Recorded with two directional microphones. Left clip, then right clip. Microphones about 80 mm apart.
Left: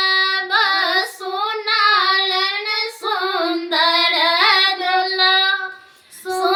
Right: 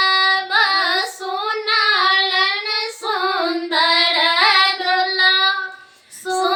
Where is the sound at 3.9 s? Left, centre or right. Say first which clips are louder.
Even; left.